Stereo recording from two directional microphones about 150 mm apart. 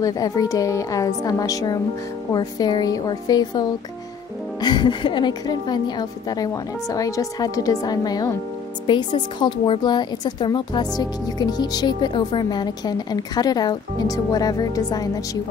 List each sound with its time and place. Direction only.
0.0 s speech: 25° left (ahead or behind)